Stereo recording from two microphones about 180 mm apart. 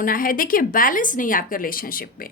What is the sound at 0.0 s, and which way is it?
Speech, 50° left (ahead or behind).